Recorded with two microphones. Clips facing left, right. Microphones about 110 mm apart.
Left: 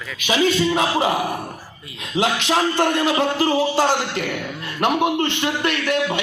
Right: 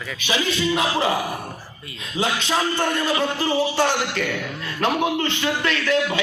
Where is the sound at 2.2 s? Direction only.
90° left.